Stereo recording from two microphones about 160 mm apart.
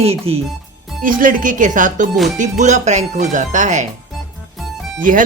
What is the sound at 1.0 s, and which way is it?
Speech, 60° right (ahead or behind).